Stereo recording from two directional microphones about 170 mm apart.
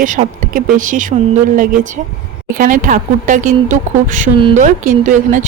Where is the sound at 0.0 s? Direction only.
50° right (ahead or behind).